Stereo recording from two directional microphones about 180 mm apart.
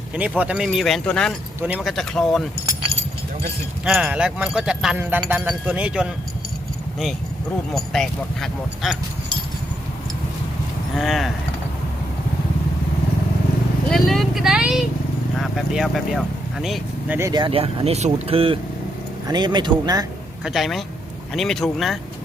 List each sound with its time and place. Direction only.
0.2 s speech: 5° right (ahead or behind)
3.8 s speech: 5° right (ahead or behind)
7.7 s speech: centre (ahead or behind)
10.9 s speech: centre (ahead or behind)
13.9 s speech: centre (ahead or behind)
17.2 s speech: 20° right (ahead or behind)
20.4 s speech: centre (ahead or behind)